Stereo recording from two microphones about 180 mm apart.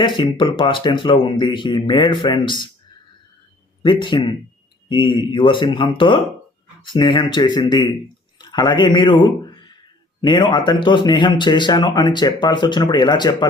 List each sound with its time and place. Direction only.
0.0 s speech: 25° left (ahead or behind)
3.8 s a man's voice: 25° left (ahead or behind)